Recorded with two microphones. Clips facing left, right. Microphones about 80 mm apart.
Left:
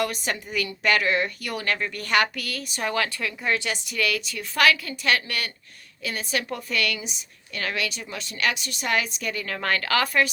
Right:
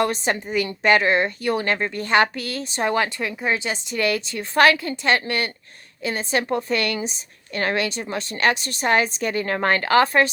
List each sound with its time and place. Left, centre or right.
0.0 s a woman's voice: right